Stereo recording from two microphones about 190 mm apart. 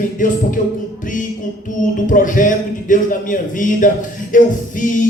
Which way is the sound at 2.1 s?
45° left (ahead or behind).